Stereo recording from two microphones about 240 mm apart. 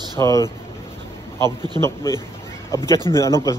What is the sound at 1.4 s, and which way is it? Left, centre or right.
Speech, centre.